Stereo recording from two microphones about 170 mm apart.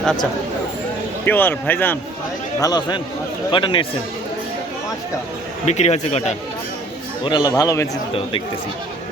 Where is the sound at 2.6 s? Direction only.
25° left (ahead or behind).